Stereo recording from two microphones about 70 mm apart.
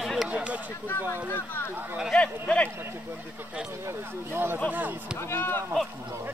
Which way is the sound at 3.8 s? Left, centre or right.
Right.